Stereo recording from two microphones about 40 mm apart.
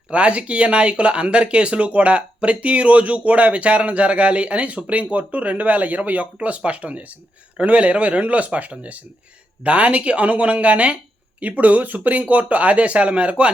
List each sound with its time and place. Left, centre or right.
0.1 s speech: right